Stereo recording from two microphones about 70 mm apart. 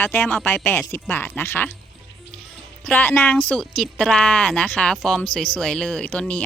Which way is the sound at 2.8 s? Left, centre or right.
Left.